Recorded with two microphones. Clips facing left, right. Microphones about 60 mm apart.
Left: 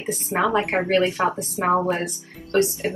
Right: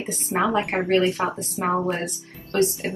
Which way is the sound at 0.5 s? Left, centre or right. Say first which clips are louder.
Left 1 dB; left.